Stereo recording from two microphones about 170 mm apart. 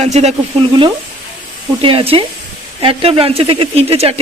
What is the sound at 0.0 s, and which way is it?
Speech, 40° right (ahead or behind).